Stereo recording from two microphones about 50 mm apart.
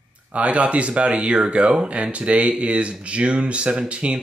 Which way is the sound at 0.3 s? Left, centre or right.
Right.